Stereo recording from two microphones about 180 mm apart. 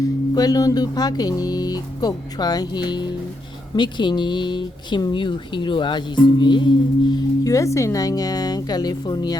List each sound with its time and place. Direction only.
0.0 s speech: 20° left (ahead or behind)